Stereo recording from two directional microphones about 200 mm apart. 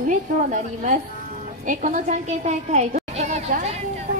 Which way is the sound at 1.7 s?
40° right (ahead or behind).